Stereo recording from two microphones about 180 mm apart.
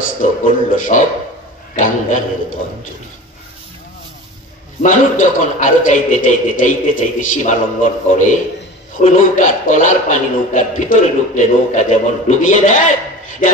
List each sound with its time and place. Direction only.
0.0 s a man's voice: 45° left (ahead or behind)
4.8 s a man's voice: 45° left (ahead or behind)